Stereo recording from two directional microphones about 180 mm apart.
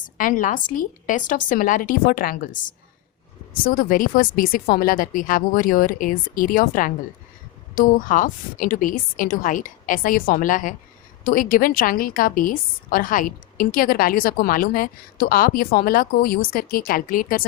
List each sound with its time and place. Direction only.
0.2 s a woman's voice: 45° left (ahead or behind)